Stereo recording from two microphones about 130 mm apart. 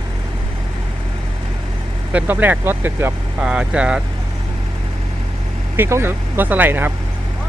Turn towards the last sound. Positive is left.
turn(degrees=-15)  # may be behind; listen again after turning